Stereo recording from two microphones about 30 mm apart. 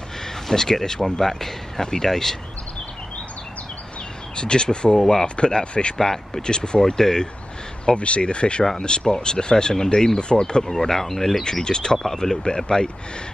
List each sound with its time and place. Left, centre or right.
0.5 s speech: centre
4.4 s speech: left
5.2 s speech: left
5.9 s speech: centre
6.4 s speech: left
7.8 s speech: left
10.6 s speech: centre
11.6 s speech: left